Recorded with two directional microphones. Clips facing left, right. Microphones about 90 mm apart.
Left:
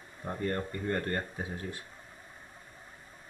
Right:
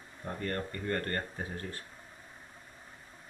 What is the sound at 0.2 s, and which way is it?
Speech, 15° left (ahead or behind).